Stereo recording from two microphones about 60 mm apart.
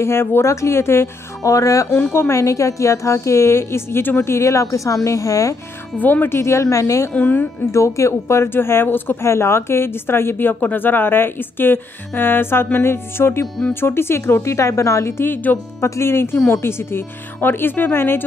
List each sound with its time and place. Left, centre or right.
0.0 s speech: left
1.4 s speech: left
2.1 s a woman's voice: left
4.3 s a woman's voice: left
5.9 s a woman's voice: left
6.5 s a woman's voice: left
7.2 s a woman's voice: left
7.7 s a woman's voice: left
15.5 s a woman's voice: left
15.8 s a woman's voice: left